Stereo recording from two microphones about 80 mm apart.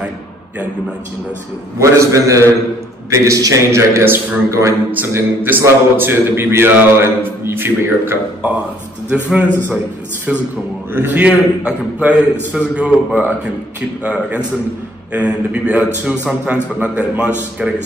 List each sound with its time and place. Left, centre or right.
1.8 s a man's voice: right
4.5 s a man's voice: right
4.9 s a man's voice: right
9.1 s a man's voice: centre
10.9 s a man's voice: right
15.1 s a man's voice: centre